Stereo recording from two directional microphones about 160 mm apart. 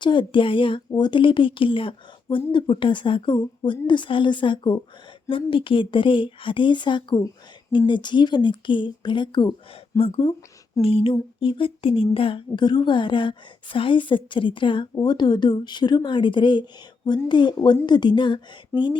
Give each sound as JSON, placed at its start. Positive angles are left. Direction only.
{"t": 0.0, "sound": "a woman's voice", "side_deg": 30}